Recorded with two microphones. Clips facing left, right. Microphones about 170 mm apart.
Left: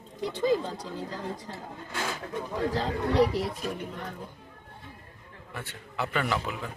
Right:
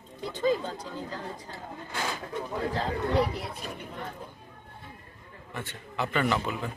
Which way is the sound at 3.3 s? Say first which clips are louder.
Left 6 dB; 40° left (ahead or behind).